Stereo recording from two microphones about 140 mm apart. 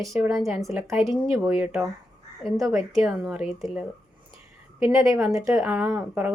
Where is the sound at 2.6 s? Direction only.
20° right (ahead or behind).